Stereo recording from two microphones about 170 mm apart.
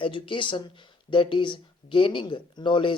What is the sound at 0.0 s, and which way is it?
Speech, 30° left (ahead or behind).